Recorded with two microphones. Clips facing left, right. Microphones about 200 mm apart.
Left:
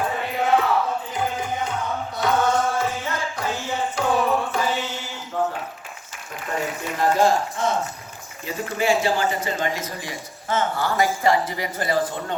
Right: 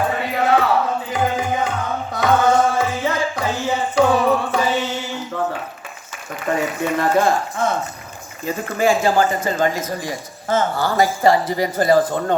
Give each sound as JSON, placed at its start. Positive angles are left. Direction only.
{"t": 0.1, "sound": "music", "side_deg": -75}
{"t": 1.1, "sound": "music", "side_deg": -90}
{"t": 6.6, "sound": "speech", "side_deg": -65}
{"t": 8.4, "sound": "a man's voice", "side_deg": -50}